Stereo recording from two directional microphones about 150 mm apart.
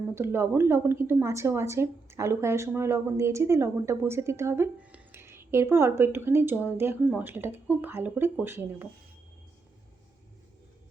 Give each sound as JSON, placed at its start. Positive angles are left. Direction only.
{"t": 0.1, "sound": "a woman's voice", "side_deg": -15}